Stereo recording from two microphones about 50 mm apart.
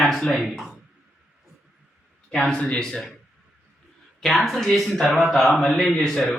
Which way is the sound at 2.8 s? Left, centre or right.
Centre.